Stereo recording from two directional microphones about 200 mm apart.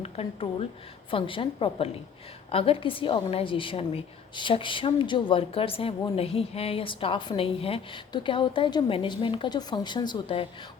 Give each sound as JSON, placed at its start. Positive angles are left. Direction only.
{"t": 0.0, "sound": "a woman's voice", "side_deg": 30}